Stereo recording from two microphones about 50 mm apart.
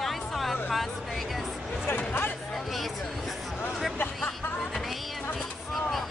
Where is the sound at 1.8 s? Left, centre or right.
Left.